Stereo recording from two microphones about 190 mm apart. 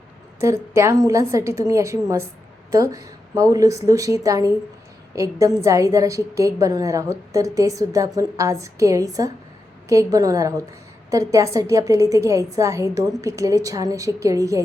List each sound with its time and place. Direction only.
0.3 s a woman's voice: 15° right (ahead or behind)